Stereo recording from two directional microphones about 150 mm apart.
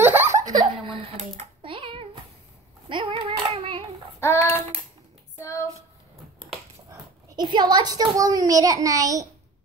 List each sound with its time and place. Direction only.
0.0 s giggle: 15° right (ahead or behind)
0.5 s giggle: 25° right (ahead or behind)
1.1 s typing: 40° right (ahead or behind)
2.9 s hands: 35° right (ahead or behind)
4.2 s child singing: 15° left (ahead or behind)
6.9 s a child's voice: 25° right (ahead or behind)